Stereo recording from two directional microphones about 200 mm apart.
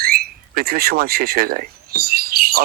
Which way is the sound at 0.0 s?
50° right (ahead or behind).